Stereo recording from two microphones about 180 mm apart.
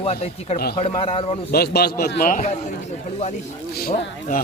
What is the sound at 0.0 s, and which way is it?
A man's voice, 35° left (ahead or behind).